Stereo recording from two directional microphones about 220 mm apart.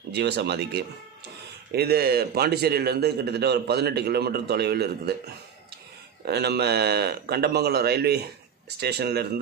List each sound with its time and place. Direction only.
0.1 s a man's voice: 50° right (ahead or behind)
6.2 s a man's voice: 50° right (ahead or behind)